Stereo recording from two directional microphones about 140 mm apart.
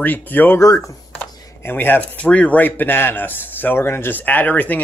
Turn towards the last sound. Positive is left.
turn(degrees=10)  # may be behind; listen again after turning